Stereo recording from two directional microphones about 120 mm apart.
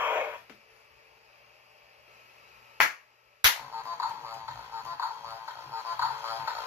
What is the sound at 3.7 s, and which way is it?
Music, 20° right (ahead or behind).